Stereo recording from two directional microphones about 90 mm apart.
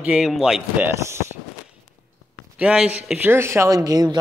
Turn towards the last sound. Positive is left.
turn(degrees=-45)  # may be behind; listen again after turning